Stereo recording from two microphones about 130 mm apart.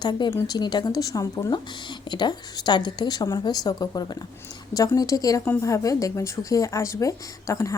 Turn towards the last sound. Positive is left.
turn(degrees=25)  # may be behind; listen again after turning